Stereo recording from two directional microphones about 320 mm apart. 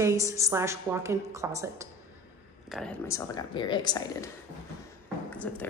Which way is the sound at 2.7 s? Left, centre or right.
Centre.